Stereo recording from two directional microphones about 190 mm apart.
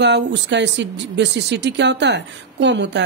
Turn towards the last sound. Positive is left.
turn(degrees=-65)  # may be behind; listen again after turning